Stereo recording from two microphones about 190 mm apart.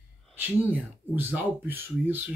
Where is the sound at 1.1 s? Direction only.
10° right (ahead or behind).